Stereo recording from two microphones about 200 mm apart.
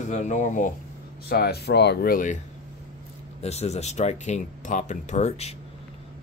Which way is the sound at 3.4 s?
30° left (ahead or behind).